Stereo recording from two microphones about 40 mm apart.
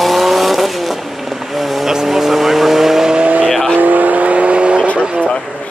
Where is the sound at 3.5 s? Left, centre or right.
Centre.